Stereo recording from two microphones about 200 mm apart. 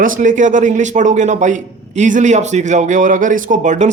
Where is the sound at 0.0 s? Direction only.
40° right (ahead or behind).